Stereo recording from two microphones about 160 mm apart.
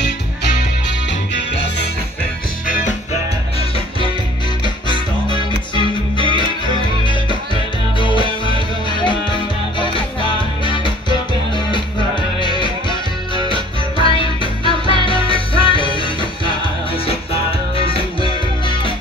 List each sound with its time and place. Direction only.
4.8 s music: 30° left (ahead or behind)
8.0 s music: 30° left (ahead or behind)
14.0 s music: 35° left (ahead or behind)